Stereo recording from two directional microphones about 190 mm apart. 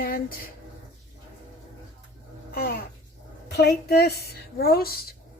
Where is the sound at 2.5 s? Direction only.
50° left (ahead or behind).